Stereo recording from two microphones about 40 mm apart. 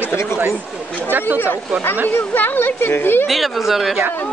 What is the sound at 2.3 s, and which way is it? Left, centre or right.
Speech, left.